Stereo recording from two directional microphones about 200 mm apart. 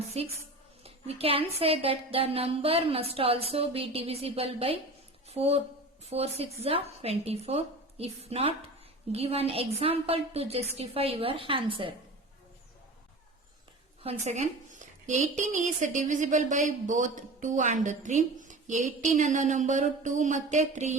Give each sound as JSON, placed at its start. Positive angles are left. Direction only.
{"t": 0.1, "sound": "a woman's voice", "side_deg": -30}
{"t": 14.0, "sound": "a woman's voice", "side_deg": -30}